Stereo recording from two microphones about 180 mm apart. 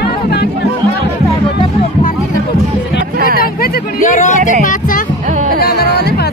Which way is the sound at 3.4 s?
55° left (ahead or behind).